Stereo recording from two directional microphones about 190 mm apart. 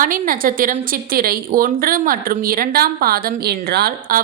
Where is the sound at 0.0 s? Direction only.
45° right (ahead or behind).